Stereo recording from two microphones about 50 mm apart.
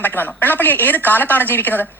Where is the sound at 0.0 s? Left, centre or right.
Left.